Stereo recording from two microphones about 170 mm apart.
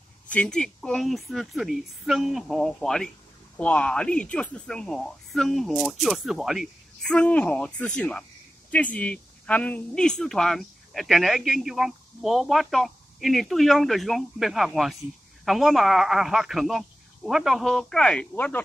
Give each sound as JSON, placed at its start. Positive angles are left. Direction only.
{"t": 0.3, "sound": "speech", "side_deg": 5}